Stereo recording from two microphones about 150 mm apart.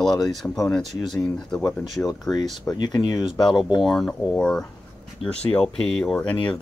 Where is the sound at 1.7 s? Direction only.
Centre (ahead or behind).